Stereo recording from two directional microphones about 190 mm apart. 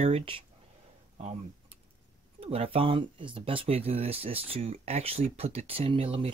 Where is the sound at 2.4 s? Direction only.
30° right (ahead or behind).